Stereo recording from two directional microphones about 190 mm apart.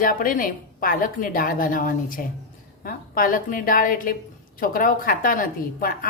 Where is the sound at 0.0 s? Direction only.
45° left (ahead or behind).